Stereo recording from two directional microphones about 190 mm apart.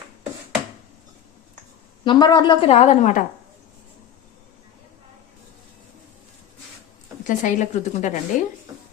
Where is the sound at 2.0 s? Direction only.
20° left (ahead or behind); by 3.2 s 40° left (ahead or behind).